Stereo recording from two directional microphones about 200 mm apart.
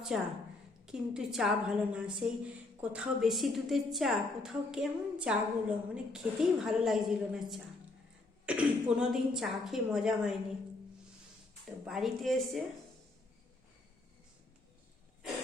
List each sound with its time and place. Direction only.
0.1 s a woman's voice: 5° right (ahead or behind)
11.6 s a woman's voice: centre (ahead or behind)